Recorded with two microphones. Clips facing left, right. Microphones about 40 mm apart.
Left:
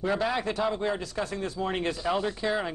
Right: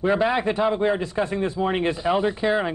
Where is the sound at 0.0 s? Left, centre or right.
Right.